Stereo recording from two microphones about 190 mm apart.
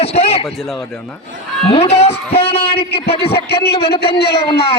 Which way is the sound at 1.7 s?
35° left (ahead or behind).